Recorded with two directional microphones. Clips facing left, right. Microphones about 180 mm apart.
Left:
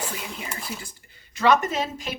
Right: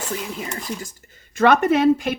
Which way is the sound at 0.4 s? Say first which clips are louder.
Right 5 dB; 5° left (ahead or behind).